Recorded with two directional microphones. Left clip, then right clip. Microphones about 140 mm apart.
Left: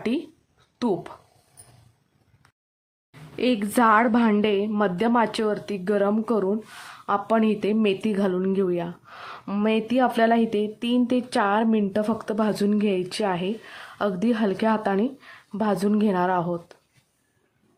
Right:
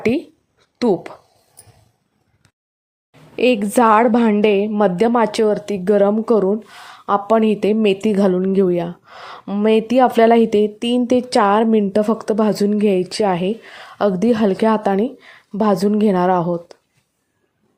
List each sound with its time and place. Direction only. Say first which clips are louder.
0.8 s speech: right 8 dB; 35° right (ahead or behind)
3.3 s speech: right 8 dB; 25° right (ahead or behind)